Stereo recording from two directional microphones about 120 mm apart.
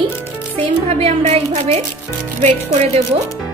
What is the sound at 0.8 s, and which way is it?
Speech, 65° right (ahead or behind).